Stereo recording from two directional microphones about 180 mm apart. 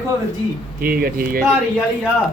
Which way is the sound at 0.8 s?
55° right (ahead or behind).